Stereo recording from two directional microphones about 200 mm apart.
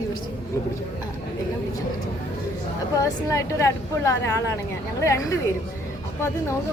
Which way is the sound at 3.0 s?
15° left (ahead or behind).